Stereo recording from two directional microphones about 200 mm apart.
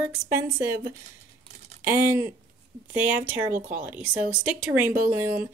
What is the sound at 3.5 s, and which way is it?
Speech, 45° right (ahead or behind).